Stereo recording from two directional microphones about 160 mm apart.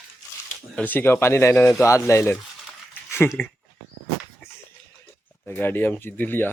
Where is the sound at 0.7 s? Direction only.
10° left (ahead or behind).